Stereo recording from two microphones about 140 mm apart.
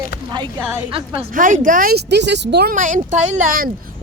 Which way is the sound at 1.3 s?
70° right (ahead or behind).